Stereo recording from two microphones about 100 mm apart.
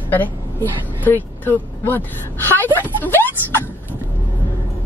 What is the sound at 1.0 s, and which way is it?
A woman's voice, 20° left (ahead or behind).